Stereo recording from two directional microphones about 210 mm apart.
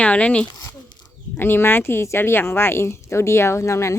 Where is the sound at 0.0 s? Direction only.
5° left (ahead or behind).